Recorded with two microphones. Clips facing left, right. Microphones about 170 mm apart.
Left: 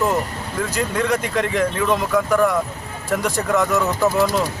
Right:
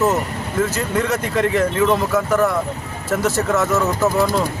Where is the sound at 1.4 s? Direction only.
5° right (ahead or behind).